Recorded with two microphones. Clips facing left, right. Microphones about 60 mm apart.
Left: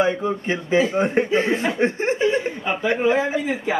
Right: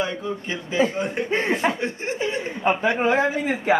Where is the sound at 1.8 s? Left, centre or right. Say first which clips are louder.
Left 6 dB; left.